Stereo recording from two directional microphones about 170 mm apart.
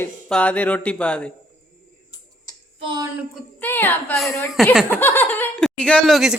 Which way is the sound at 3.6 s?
10° left (ahead or behind).